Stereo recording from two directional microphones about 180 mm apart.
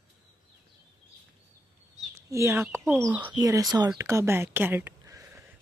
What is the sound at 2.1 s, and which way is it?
Chicken, 15° right (ahead or behind).